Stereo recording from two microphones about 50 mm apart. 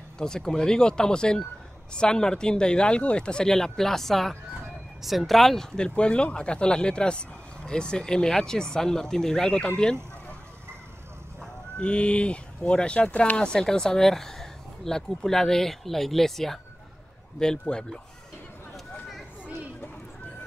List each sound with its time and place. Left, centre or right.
0.2 s speech: centre
5.8 s speech: left
11.8 s speech: left